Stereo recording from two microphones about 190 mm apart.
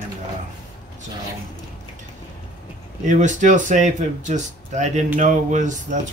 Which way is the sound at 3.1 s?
40° right (ahead or behind).